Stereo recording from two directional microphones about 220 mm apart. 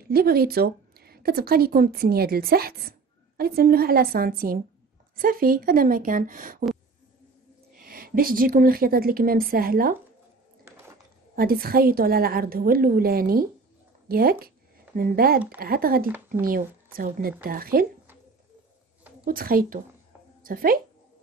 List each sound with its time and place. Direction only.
0.0 s a woman's voice: 45° right (ahead or behind)
7.7 s a woman's voice: 40° right (ahead or behind)
11.3 s a woman's voice: 45° right (ahead or behind)
19.2 s a woman's voice: 40° right (ahead or behind)